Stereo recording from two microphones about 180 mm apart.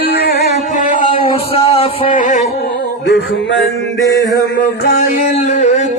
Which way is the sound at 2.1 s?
45° left (ahead or behind).